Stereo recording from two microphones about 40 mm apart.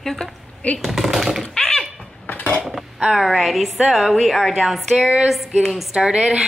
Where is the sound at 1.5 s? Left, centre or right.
Left.